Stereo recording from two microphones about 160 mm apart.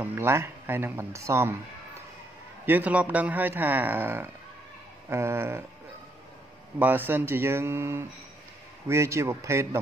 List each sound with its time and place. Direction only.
0.0 s a man's voice: 10° right (ahead or behind)
2.6 s a man's voice: 10° right (ahead or behind)
6.8 s a man's voice: 10° right (ahead or behind)